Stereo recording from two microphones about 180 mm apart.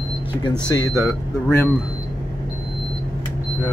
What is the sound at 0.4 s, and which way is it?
Speech, 20° left (ahead or behind).